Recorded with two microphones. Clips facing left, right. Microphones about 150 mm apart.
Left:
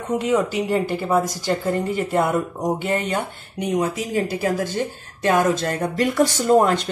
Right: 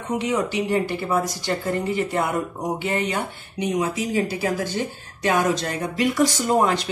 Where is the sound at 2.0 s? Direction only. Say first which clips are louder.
Left 3 dB; 45° left (ahead or behind).